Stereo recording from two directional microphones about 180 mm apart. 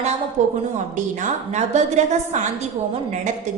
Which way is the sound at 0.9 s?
40° right (ahead or behind).